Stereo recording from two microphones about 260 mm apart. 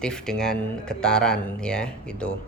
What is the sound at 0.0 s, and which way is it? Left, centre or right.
Speech, centre.